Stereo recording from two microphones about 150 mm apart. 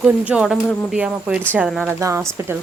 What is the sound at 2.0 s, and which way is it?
Speech, 20° right (ahead or behind).